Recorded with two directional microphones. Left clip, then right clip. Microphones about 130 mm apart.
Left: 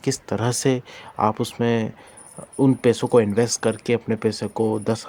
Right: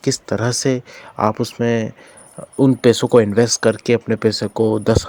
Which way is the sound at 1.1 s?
25° right (ahead or behind).